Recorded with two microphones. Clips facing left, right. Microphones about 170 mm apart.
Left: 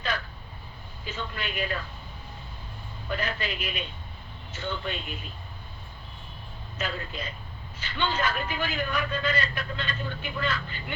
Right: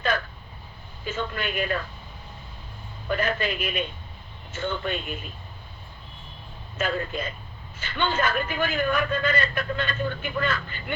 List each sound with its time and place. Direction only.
1.0 s a man's voice: 50° right (ahead or behind)
3.1 s a man's voice: 50° right (ahead or behind)
6.7 s a man's voice: 50° right (ahead or behind)